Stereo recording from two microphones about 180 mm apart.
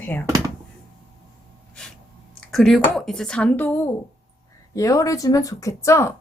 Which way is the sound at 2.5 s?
Centre (ahead or behind).